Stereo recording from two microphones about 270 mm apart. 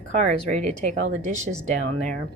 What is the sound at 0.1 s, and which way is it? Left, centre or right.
A woman's voice, right.